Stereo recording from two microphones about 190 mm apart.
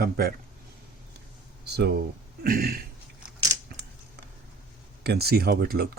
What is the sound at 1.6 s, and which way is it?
Speech, 60° right (ahead or behind).